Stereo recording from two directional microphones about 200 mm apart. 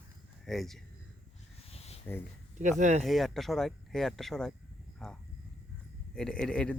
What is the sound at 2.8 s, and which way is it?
Speech, 35° right (ahead or behind).